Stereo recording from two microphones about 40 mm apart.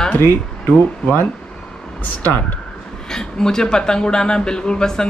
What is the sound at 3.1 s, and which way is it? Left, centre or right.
A woman's voice, centre.